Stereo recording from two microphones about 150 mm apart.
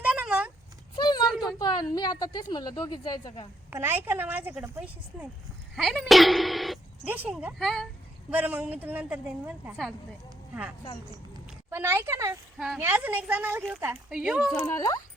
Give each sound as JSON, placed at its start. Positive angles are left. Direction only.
{"t": 0.0, "sound": "a sound", "side_deg": -10}
{"t": 0.9, "sound": "a sound", "side_deg": 30}
{"t": 1.3, "sound": "a sound", "side_deg": 0}
{"t": 1.5, "sound": "a woman's voice", "side_deg": 25}
{"t": 3.7, "sound": "a woman's voice", "side_deg": -15}
{"t": 5.7, "sound": "a woman's voice", "side_deg": 0}
{"t": 7.6, "sound": "speech", "side_deg": 5}
{"t": 8.3, "sound": "a woman's voice", "side_deg": -10}
{"t": 10.5, "sound": "a woman's voice", "side_deg": -15}
{"t": 12.5, "sound": "speech", "side_deg": -5}
{"t": 12.8, "sound": "a woman's voice", "side_deg": -15}
{"t": 14.6, "sound": "a woman's voice", "side_deg": 20}